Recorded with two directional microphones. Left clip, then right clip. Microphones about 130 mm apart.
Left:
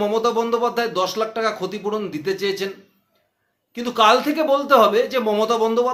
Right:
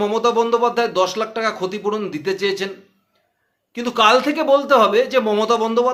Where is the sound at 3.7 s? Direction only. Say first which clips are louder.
Right 1 dB; 20° right (ahead or behind).